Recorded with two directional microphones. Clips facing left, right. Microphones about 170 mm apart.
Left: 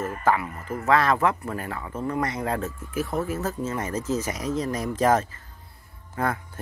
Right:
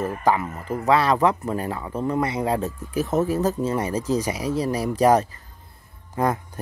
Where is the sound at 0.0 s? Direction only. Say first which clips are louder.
Right 2 dB; 15° right (ahead or behind).